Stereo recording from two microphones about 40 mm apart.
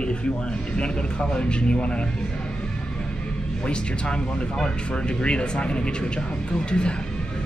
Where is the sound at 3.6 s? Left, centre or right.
Left.